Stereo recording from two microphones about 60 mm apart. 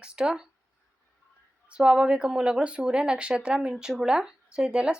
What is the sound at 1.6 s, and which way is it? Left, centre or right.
A woman's voice, centre.